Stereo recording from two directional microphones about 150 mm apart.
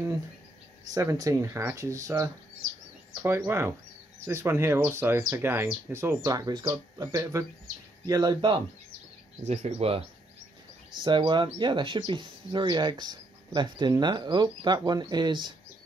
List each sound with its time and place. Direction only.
0.9 s speech: 25° right (ahead or behind)
9.5 s speech: 45° right (ahead or behind)
11.1 s speech: 30° right (ahead or behind)